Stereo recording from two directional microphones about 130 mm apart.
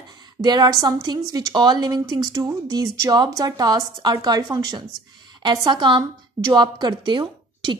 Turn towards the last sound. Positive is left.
turn(degrees=-35)  # may be behind; listen again after turning